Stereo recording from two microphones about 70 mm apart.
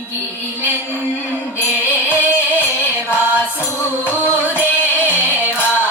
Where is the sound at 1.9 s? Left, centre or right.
Right.